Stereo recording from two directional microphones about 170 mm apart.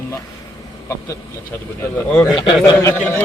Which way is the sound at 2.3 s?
25° left (ahead or behind).